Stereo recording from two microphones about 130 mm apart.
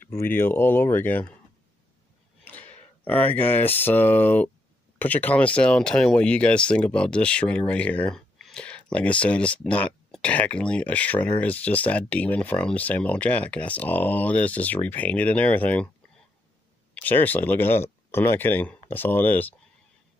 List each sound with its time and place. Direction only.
0.0 s speech: 15° left (ahead or behind)
2.4 s a sound: 15° left (ahead or behind)
3.0 s speech: 15° left (ahead or behind)
16.9 s speech: 15° left (ahead or behind)